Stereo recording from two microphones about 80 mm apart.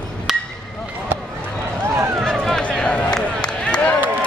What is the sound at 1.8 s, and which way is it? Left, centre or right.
Run, right.